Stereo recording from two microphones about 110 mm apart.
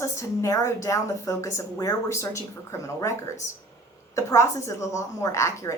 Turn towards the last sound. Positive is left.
turn(degrees=25)  # may be behind; listen again after turning